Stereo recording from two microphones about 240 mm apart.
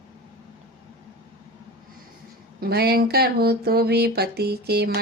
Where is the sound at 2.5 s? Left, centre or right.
Right.